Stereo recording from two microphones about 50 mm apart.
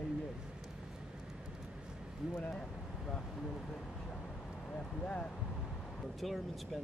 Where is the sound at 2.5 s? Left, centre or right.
Centre.